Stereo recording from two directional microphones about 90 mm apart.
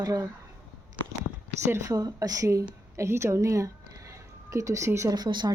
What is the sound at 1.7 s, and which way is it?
A woman's voice, 35° right (ahead or behind).